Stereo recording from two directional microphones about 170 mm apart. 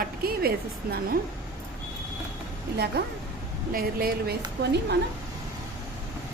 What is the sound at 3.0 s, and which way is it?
A woman's voice, 70° right (ahead or behind).